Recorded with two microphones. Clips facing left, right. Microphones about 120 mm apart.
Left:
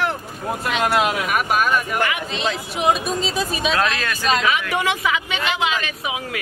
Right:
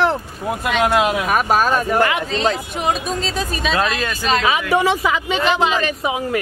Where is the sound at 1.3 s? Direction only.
35° right (ahead or behind).